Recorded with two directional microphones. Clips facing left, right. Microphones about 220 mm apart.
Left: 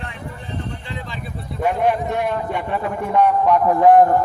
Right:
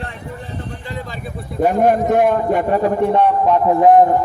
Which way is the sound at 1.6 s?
45° right (ahead or behind).